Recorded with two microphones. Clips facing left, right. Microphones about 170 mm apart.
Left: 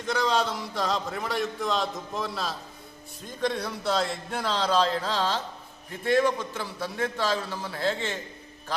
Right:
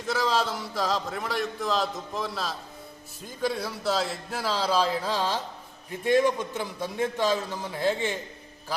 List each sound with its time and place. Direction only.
0.0 s a man's voice: 5° right (ahead or behind)